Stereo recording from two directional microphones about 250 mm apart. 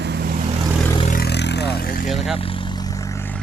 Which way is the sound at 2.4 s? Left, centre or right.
Left.